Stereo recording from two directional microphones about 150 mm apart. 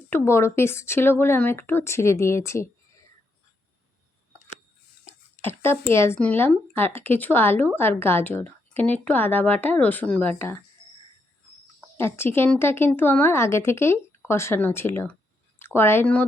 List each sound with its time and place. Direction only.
0.1 s a woman's voice: 15° left (ahead or behind)
5.4 s a woman's voice: 15° left (ahead or behind)
11.9 s a woman's voice: 15° left (ahead or behind)